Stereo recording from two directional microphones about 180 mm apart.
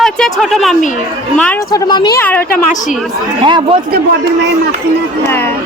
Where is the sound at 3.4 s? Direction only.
25° right (ahead or behind).